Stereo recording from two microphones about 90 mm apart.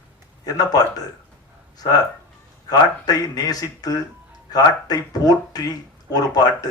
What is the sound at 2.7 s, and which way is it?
Speech, 45° left (ahead or behind).